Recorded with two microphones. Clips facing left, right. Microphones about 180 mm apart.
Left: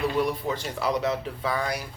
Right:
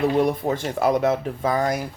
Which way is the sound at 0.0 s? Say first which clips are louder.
Right 6 dB; 50° right (ahead or behind).